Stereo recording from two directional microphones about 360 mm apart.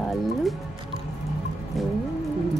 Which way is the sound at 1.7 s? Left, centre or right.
Centre.